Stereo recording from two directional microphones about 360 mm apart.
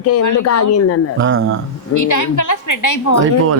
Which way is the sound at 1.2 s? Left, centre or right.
Right.